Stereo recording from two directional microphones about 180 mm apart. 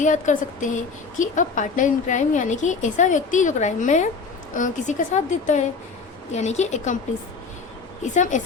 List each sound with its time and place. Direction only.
0.0 s a woman's voice: 45° left (ahead or behind)
8.0 s a woman's voice: 40° left (ahead or behind)